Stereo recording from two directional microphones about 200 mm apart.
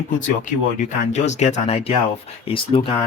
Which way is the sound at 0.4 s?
40° left (ahead or behind).